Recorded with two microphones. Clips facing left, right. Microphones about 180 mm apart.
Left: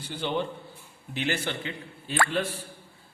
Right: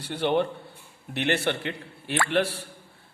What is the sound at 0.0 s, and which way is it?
A man's voice, 65° right (ahead or behind).